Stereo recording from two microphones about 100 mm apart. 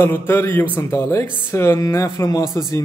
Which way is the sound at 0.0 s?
25° left (ahead or behind).